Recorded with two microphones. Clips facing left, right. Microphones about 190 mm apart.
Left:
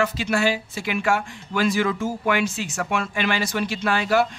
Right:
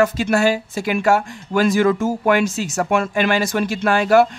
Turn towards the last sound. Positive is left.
turn(degrees=-50)  # may be behind; listen again after turning